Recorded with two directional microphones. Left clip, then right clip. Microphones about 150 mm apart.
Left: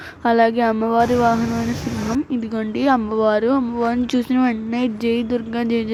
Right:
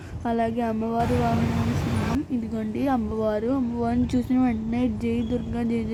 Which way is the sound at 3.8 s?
20° left (ahead or behind).